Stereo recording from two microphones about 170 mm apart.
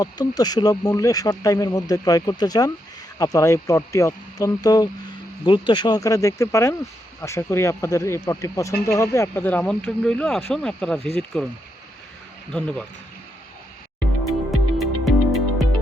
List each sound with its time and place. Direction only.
0.0 s speech: 20° left (ahead or behind); by 12.8 s 5° left (ahead or behind)
14.3 s music: centre (ahead or behind)